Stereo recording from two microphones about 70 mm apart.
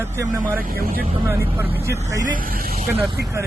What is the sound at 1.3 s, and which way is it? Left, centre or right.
Speech, right.